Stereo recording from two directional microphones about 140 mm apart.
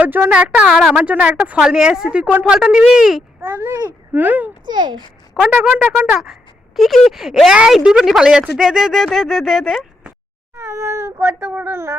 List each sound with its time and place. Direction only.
0.0 s speech: 15° right (ahead or behind)
1.0 s speech: 10° right (ahead or behind)
4.6 s a child's voice: 35° right (ahead or behind)
5.3 s speech: 5° right (ahead or behind)
6.7 s speech: centre (ahead or behind)
10.5 s speech: 20° right (ahead or behind)